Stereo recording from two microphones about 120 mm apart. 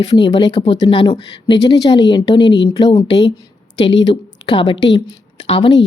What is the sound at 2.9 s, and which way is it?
Speech, 50° left (ahead or behind).